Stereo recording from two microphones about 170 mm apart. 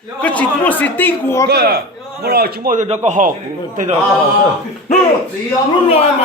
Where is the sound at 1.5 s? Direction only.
65° right (ahead or behind).